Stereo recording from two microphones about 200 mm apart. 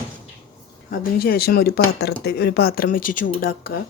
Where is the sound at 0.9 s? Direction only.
50° left (ahead or behind).